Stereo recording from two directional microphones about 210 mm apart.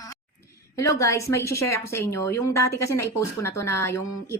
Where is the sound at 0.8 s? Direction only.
15° left (ahead or behind).